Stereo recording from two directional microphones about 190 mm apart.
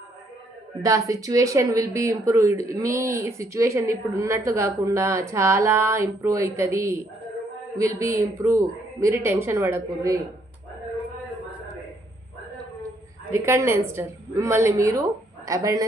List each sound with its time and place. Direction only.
0.8 s speech: 15° right (ahead or behind)
13.3 s speech: 15° right (ahead or behind)